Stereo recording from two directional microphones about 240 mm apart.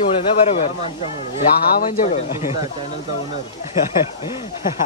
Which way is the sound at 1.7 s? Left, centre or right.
Left.